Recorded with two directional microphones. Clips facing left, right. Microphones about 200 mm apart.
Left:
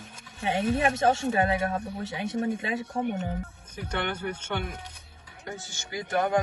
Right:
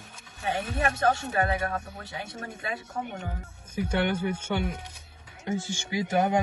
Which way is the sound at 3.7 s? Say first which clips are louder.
Right 5 dB; 10° right (ahead or behind).